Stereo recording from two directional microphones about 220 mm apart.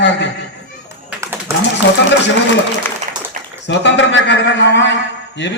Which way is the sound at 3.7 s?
55° left (ahead or behind).